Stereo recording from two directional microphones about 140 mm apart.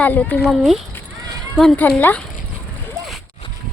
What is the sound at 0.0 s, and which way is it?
Speech, 10° left (ahead or behind).